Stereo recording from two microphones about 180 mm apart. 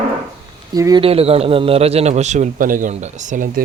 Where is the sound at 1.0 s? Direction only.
35° right (ahead or behind).